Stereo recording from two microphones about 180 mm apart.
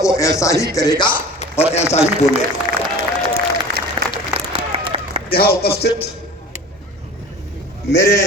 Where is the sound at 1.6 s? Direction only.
35° left (ahead or behind).